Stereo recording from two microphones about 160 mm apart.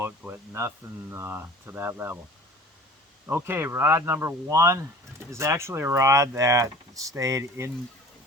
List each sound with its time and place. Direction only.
0.0 s speech: 15° right (ahead or behind)
3.2 s speech: 15° right (ahead or behind)